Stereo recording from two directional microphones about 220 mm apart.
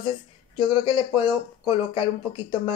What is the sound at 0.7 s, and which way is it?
Speech, 20° left (ahead or behind).